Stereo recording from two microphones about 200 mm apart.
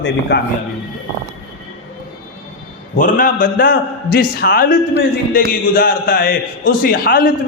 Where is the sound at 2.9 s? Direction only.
45° left (ahead or behind).